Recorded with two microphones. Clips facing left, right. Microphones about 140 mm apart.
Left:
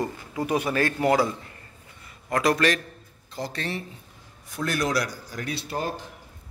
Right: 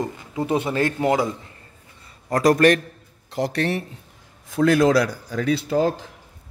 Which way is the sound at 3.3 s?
75° right (ahead or behind).